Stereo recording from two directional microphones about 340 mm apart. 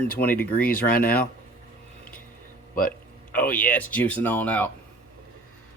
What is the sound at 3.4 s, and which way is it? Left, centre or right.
Speech, left.